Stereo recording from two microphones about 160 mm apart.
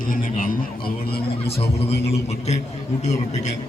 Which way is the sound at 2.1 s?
45° left (ahead or behind).